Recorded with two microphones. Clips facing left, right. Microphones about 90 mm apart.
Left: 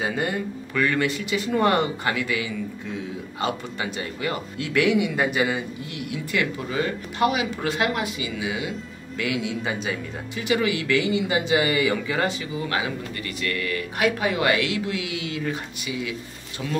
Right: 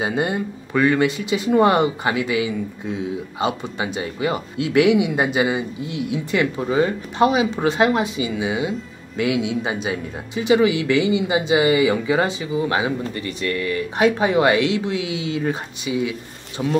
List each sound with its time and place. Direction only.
0.0 s speech: 25° right (ahead or behind)